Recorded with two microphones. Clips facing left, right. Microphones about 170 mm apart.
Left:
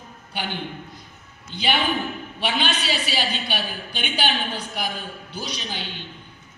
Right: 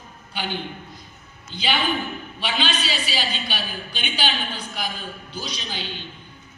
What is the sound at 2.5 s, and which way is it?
A woman's voice, 60° left (ahead or behind).